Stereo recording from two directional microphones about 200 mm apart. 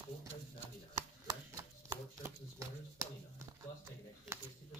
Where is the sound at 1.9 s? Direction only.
15° right (ahead or behind).